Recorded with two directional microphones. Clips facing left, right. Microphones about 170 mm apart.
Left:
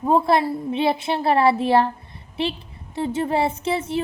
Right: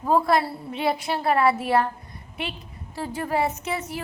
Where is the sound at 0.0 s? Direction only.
25° left (ahead or behind).